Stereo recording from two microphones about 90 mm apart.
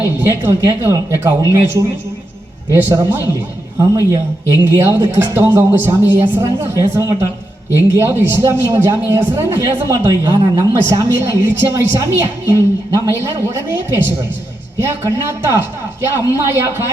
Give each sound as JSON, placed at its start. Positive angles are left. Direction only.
{"t": 0.0, "sound": "a woman's voice", "side_deg": -25}
{"t": 3.8, "sound": "a woman's voice", "side_deg": -40}
{"t": 10.1, "sound": "a woman's voice", "side_deg": -40}
{"t": 14.8, "sound": "speech", "side_deg": -30}